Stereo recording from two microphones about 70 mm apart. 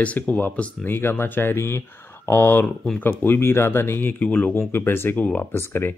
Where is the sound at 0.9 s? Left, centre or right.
Left.